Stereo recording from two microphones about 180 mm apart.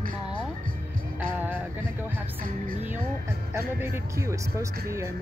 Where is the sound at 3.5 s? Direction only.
15° right (ahead or behind).